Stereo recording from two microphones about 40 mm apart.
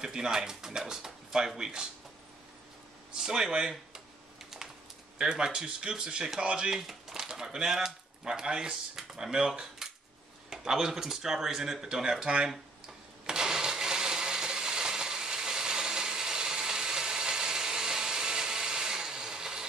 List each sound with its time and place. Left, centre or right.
0.0 s speech: centre
3.2 s typing: centre
5.2 s speech: right
6.9 s speech: centre
13.3 s a sound: centre